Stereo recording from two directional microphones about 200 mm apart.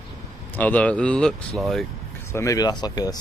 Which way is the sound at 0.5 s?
5° left (ahead or behind).